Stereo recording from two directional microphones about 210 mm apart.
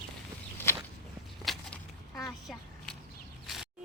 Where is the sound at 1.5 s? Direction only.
Centre (ahead or behind).